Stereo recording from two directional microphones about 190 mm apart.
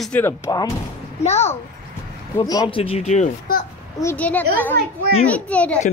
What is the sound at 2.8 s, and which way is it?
Speech, 35° left (ahead or behind).